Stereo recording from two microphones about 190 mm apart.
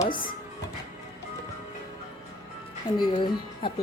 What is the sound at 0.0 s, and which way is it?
Speech, 25° left (ahead or behind).